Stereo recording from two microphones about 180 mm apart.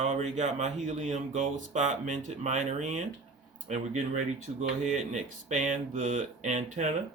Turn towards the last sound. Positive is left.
turn(degrees=-40)  # may be behind; listen again after turning